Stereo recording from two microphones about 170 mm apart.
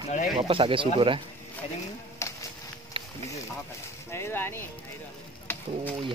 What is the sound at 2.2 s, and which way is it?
Music, 15° left (ahead or behind).